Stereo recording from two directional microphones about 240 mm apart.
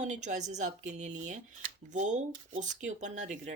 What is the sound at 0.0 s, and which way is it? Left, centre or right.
Speech, right.